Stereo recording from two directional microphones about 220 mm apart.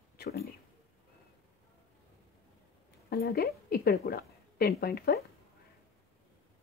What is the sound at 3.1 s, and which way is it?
A woman's voice, 45° left (ahead or behind).